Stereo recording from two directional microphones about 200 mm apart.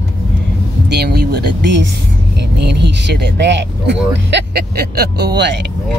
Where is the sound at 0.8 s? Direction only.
55° right (ahead or behind).